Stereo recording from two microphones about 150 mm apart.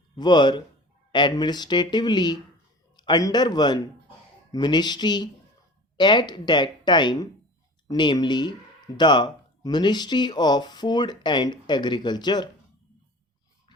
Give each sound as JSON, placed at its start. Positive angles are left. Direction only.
{"t": 0.2, "sound": "speech", "side_deg": 30}